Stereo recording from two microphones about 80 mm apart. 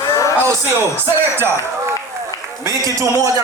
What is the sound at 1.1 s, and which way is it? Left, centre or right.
Speech, right.